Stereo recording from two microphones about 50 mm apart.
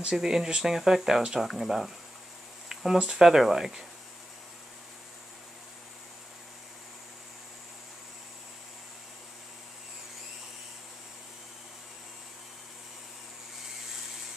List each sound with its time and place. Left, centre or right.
0.0 s speech: centre
2.7 s a sound: centre
3.0 s speech: centre